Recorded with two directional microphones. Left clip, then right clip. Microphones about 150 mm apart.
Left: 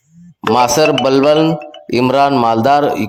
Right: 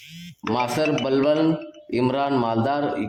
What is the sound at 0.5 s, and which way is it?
Speech, 35° left (ahead or behind).